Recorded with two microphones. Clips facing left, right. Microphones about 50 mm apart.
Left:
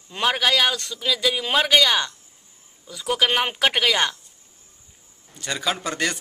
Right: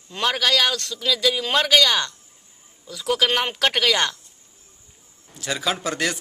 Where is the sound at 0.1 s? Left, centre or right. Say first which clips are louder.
Even; centre.